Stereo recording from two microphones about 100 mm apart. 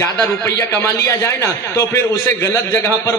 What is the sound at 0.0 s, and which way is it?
A man's voice, 30° left (ahead or behind).